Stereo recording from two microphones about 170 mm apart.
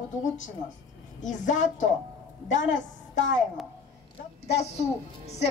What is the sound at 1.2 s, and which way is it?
A woman's voice, 50° left (ahead or behind).